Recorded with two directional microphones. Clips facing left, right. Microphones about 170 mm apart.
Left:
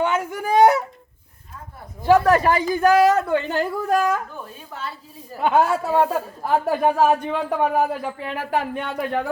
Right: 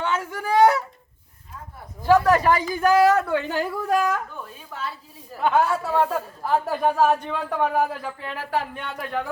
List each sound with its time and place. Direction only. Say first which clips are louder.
0.0 s a sound: left 4 dB; 15° left (ahead or behind)
2.0 s speech: left 2 dB; 20° left (ahead or behind)
3.4 s a woman's voice: left 2 dB; 10° right (ahead or behind); by 9.2 s 20° left (ahead or behind)